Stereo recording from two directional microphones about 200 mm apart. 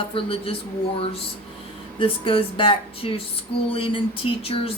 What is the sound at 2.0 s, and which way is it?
Speech, 25° left (ahead or behind).